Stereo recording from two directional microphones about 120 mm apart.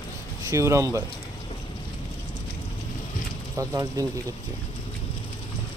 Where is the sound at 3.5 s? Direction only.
25° right (ahead or behind).